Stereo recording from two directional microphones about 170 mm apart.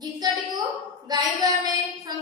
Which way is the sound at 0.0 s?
25° right (ahead or behind).